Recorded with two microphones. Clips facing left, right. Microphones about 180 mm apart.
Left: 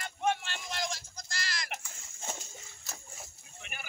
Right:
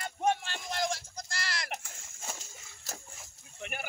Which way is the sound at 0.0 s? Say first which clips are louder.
Right 2 dB; 40° right (ahead or behind).